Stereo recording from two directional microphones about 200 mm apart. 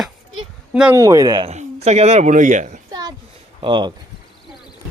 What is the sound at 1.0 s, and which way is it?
Speech, 20° right (ahead or behind).